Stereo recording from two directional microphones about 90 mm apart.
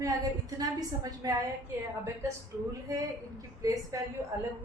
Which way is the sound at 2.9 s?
40° right (ahead or behind).